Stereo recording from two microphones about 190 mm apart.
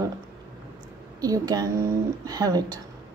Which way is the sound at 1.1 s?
20° right (ahead or behind).